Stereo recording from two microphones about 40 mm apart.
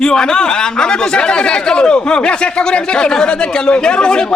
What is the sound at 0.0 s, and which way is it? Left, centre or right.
Speech, centre.